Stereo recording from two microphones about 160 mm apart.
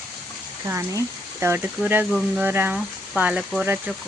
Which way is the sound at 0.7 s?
15° right (ahead or behind).